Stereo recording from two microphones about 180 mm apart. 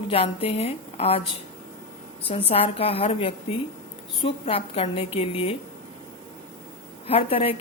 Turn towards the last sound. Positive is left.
turn(degrees=30)  # may be behind; listen again after turning